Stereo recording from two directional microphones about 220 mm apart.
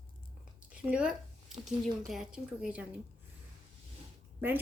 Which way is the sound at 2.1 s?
5° right (ahead or behind).